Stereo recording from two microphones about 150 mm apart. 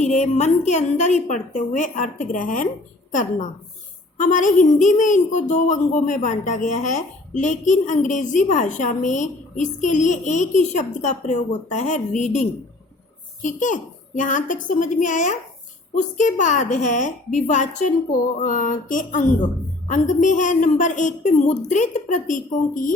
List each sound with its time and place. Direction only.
0.0 s a woman's voice: 50° left (ahead or behind)